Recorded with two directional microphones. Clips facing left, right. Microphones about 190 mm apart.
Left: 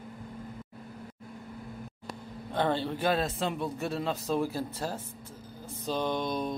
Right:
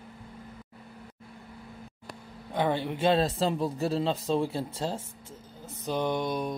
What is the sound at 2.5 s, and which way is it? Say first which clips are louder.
A man's voice: right 1 dB; 15° right (ahead or behind).